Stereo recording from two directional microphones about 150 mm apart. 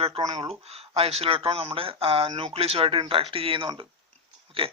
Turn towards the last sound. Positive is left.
turn(degrees=-40)  # may be behind; listen again after turning